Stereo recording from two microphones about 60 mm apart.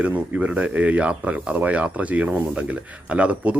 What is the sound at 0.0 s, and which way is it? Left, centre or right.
Speech, right.